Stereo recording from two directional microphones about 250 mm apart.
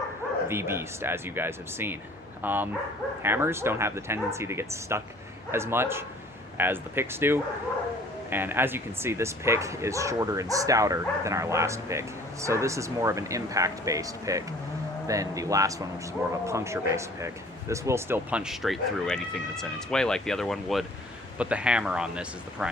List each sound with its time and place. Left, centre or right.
0.4 s speech: centre